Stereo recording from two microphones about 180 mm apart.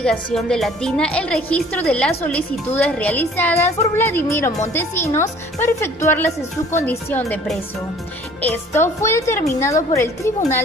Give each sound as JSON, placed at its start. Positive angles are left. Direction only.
{"t": 0.0, "sound": "a woman's voice", "side_deg": 5}
{"t": 8.4, "sound": "a woman's voice", "side_deg": 10}